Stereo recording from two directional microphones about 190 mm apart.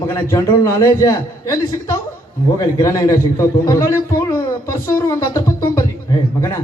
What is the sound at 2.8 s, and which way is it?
A man's voice, 15° left (ahead or behind).